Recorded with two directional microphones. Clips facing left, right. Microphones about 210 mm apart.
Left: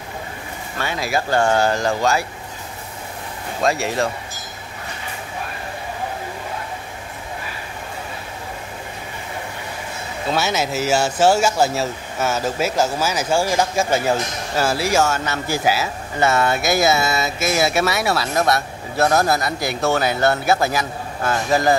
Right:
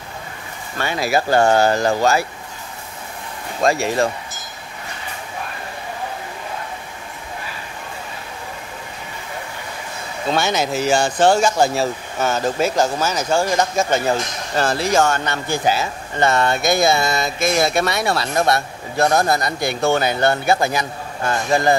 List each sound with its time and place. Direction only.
0.7 s speech: centre (ahead or behind)
1.3 s speech: 40° right (ahead or behind)
3.6 s speech: centre (ahead or behind)
10.3 s speech: 5° left (ahead or behind)